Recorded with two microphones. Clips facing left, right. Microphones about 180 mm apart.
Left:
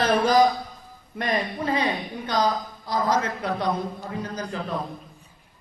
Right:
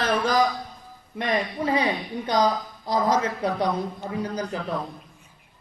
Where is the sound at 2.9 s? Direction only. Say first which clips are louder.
Right 1 dB; 20° right (ahead or behind).